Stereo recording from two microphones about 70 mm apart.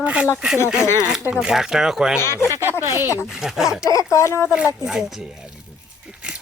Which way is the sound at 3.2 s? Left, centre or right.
Centre.